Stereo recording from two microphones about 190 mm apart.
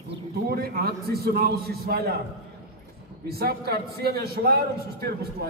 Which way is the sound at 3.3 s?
55° right (ahead or behind).